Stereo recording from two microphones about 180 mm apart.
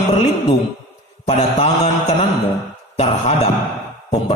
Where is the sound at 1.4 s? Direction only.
35° left (ahead or behind).